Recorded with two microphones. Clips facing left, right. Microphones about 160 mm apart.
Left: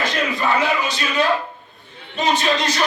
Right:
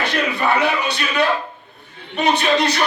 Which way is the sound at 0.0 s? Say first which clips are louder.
Right 1 dB; 65° right (ahead or behind).